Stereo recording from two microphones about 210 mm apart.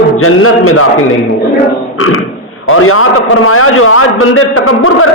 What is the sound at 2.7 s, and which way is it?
A man's voice, 90° left.